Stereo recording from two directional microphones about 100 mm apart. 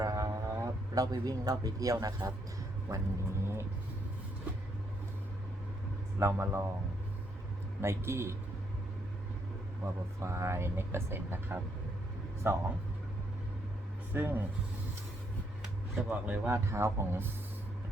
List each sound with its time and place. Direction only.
0.0 s a sound: 35° right (ahead or behind)
2.9 s speech: 35° right (ahead or behind)
6.1 s speech: 25° right (ahead or behind)
7.8 s speech: 25° right (ahead or behind)
9.8 s speech: 30° right (ahead or behind)
14.1 s speech: 20° right (ahead or behind)
15.6 s speech: 20° right (ahead or behind)